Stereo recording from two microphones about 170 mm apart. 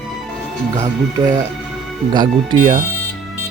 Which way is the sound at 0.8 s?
20° right (ahead or behind).